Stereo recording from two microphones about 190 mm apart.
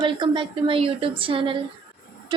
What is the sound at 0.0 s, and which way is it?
A woman's voice, 25° right (ahead or behind).